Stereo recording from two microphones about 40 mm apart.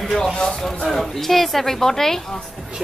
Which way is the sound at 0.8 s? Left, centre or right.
Centre.